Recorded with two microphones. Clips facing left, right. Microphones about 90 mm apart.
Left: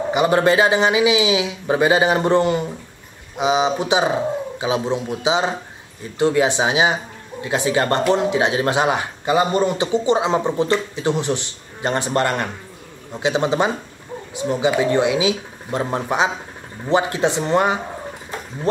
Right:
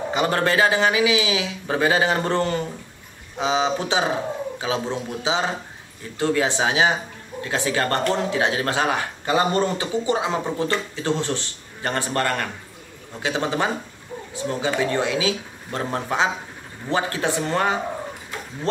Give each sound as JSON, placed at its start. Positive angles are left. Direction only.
{"t": 0.1, "sound": "speech", "side_deg": 15}